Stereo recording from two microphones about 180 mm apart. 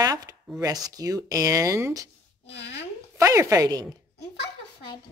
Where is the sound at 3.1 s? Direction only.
15° right (ahead or behind).